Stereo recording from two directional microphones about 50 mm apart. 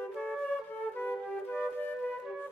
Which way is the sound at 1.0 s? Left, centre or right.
Left.